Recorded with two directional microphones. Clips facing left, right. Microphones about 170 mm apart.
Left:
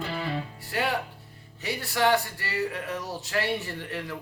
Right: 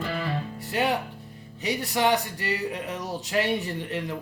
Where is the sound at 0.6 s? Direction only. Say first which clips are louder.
Right 4 dB; 20° right (ahead or behind).